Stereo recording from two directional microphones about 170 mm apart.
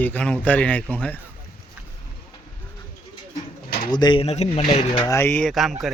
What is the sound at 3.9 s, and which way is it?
Speech, 25° left (ahead or behind).